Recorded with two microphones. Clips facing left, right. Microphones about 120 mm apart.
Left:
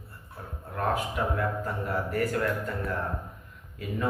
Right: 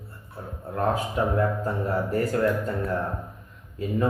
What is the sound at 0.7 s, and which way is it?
A man's voice, 30° right (ahead or behind).